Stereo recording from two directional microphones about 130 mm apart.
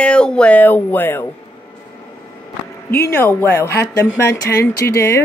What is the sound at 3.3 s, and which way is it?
Speech, 15° left (ahead or behind).